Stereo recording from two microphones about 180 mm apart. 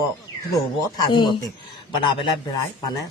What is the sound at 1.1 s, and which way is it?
Speech, 25° left (ahead or behind).